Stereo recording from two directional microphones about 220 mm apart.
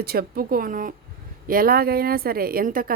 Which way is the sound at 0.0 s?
45° right (ahead or behind).